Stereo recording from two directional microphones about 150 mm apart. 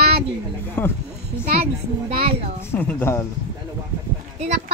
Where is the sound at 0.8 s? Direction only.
15° left (ahead or behind).